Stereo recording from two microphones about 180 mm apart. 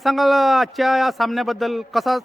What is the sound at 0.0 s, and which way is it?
Speech, centre (ahead or behind).